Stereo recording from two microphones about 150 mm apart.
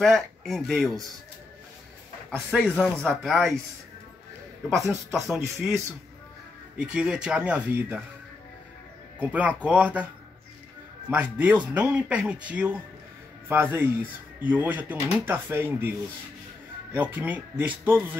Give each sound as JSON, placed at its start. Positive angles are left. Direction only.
{"t": 0.0, "sound": "speech", "side_deg": 0}
{"t": 2.3, "sound": "speech", "side_deg": 0}
{"t": 5.1, "sound": "speech", "side_deg": 0}
{"t": 6.8, "sound": "speech", "side_deg": -5}
{"t": 9.2, "sound": "speech", "side_deg": -10}
{"t": 11.1, "sound": "speech", "side_deg": -10}
{"t": 16.9, "sound": "speech", "side_deg": -10}